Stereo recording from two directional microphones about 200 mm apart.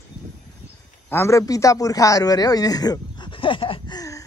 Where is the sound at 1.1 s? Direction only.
15° left (ahead or behind).